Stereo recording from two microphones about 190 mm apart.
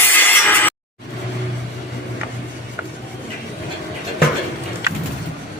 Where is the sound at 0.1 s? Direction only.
10° left (ahead or behind).